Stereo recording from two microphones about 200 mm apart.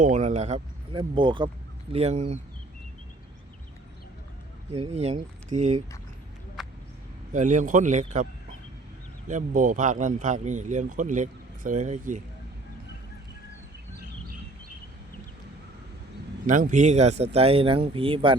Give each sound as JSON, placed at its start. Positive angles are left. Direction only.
{"t": 0.0, "sound": "speech", "side_deg": -35}
{"t": 4.7, "sound": "speech", "side_deg": -30}
{"t": 7.3, "sound": "speech", "side_deg": -40}
{"t": 16.5, "sound": "speech", "side_deg": -40}